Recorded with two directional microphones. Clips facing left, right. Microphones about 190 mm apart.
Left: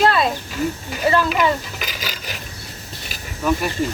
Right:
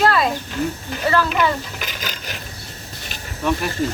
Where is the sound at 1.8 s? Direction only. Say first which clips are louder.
Even; 5° left (ahead or behind).